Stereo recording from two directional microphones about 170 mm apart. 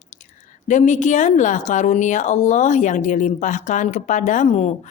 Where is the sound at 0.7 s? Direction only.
45° left (ahead or behind).